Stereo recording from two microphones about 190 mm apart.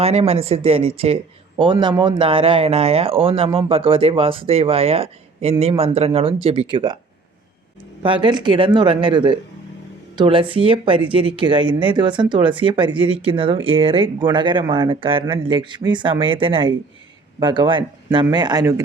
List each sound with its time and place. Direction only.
0.0 s speech: 30° right (ahead or behind)
8.0 s speech: 25° right (ahead or behind)